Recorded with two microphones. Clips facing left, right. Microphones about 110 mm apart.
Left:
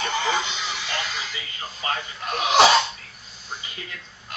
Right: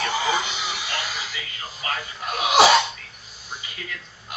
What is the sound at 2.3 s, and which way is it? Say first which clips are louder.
Sneeze: even; 10° right (ahead or behind).